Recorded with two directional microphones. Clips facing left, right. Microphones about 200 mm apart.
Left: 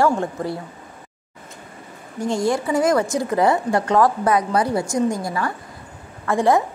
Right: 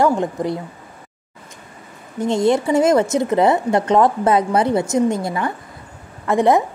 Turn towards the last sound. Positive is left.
turn(degrees=-20)  # may be behind; listen again after turning